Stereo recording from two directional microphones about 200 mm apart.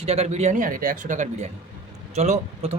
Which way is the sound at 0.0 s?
30° right (ahead or behind).